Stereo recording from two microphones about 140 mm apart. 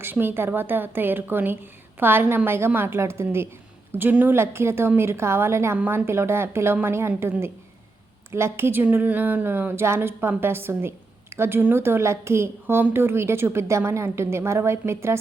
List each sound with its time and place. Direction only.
0.0 s a woman's voice: 15° right (ahead or behind)